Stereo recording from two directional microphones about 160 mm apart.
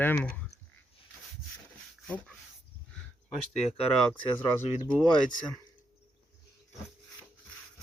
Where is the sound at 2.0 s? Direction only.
5° left (ahead or behind).